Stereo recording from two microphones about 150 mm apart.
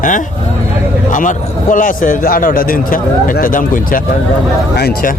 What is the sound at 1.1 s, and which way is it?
A man's voice, 60° left (ahead or behind).